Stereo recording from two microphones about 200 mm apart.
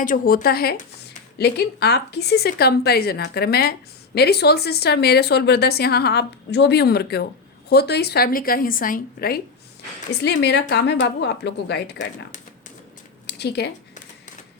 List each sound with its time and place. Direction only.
0.0 s speech: 40° left (ahead or behind)
10.2 s speech: 60° left (ahead or behind)
13.2 s a sound: 55° left (ahead or behind)